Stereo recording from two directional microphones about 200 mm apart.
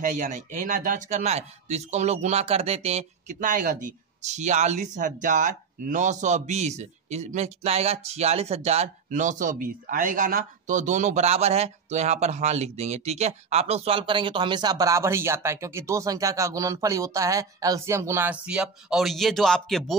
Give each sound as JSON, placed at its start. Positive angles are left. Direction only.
{"t": 0.0, "sound": "speech", "side_deg": -40}